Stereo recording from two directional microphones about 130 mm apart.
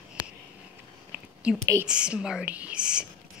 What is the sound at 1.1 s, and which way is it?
Whispering, 10° right (ahead or behind).